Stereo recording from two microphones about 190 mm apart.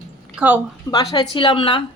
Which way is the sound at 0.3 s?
10° right (ahead or behind).